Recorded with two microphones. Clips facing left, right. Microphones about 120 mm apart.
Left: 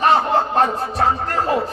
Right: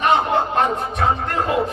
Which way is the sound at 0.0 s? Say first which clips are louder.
Left 1 dB; 35° left (ahead or behind).